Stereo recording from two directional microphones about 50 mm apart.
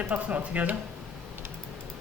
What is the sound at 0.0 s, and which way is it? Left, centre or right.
Speech, right.